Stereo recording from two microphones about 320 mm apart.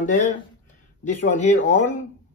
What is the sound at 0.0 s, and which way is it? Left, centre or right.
Speech, left.